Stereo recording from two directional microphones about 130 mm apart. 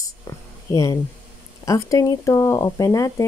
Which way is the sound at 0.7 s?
25° left (ahead or behind).